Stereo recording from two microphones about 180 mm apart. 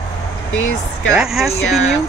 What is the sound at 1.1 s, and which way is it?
Speech, centre (ahead or behind).